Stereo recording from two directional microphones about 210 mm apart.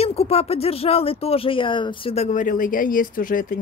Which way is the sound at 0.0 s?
30° left (ahead or behind).